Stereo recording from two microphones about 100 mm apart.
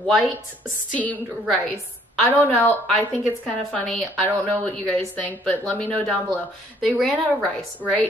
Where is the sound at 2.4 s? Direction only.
20° left (ahead or behind).